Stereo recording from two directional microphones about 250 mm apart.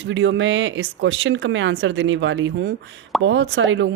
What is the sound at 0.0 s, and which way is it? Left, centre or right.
Speech, right.